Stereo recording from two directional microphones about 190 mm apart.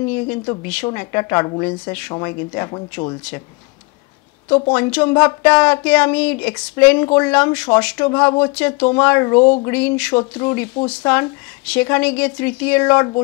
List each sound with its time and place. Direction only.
0.1 s speech: 10° left (ahead or behind)
4.7 s speech: 10° left (ahead or behind)
9.4 s a sound: 25° left (ahead or behind)
9.7 s speech: 5° left (ahead or behind)